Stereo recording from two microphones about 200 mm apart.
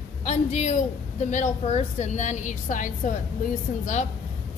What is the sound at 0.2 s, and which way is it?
A woman's voice, 35° left (ahead or behind).